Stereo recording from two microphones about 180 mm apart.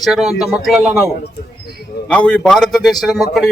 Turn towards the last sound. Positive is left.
turn(degrees=0)  # may be behind; listen again after turning